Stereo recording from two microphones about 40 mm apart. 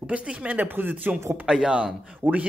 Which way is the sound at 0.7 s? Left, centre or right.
Right.